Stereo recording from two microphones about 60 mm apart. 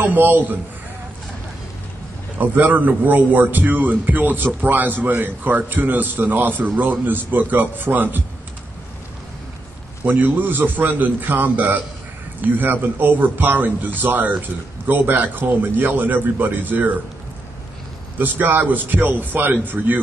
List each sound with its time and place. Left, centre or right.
0.0 s a man's voice: right
2.3 s a man's voice: right
10.0 s a man's voice: right
18.1 s a man's voice: right